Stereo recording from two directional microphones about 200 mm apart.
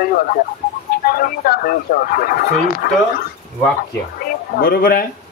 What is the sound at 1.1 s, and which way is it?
Speech, 50° left (ahead or behind).